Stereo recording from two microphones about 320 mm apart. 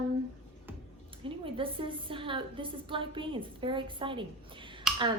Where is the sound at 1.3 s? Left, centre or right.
Centre.